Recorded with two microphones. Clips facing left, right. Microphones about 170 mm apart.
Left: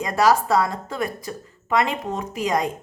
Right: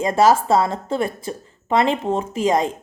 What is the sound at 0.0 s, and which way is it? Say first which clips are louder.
A woman's voice: right 3 dB; 25° right (ahead or behind).